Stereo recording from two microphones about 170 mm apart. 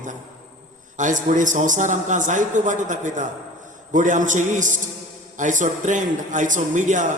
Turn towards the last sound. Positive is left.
turn(degrees=-45)  # may be behind; listen again after turning